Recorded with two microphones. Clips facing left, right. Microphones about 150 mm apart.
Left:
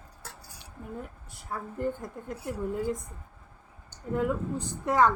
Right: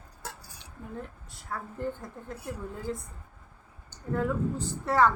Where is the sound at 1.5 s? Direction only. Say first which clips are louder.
Left 2 dB; 15° left (ahead or behind).